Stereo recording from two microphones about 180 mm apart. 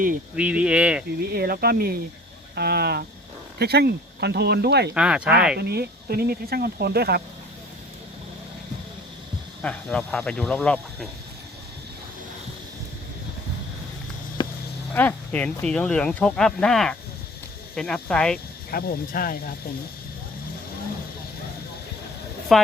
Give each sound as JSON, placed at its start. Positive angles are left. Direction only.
{"t": 0.3, "sound": "speech", "side_deg": -5}
{"t": 1.2, "sound": "speech", "side_deg": -60}
{"t": 4.9, "sound": "speech", "side_deg": -5}
{"t": 5.5, "sound": "speech", "side_deg": -60}
{"t": 9.6, "sound": "speech", "side_deg": 5}
{"t": 14.4, "sound": "a sound", "side_deg": 25}
{"t": 14.9, "sound": "speech", "side_deg": 10}
{"t": 18.7, "sound": "speech", "side_deg": 55}
{"t": 22.5, "sound": "speech", "side_deg": 0}